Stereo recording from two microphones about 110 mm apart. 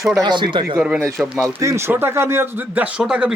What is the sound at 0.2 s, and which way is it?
Speech, 45° right (ahead or behind).